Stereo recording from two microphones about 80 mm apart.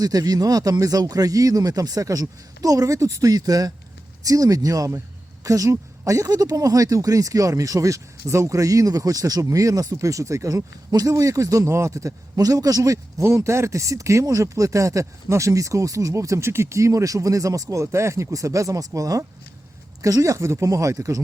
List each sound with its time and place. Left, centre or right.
0.0 s a man's voice: right